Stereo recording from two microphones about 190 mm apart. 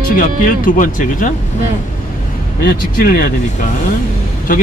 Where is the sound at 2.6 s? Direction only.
50° left (ahead or behind).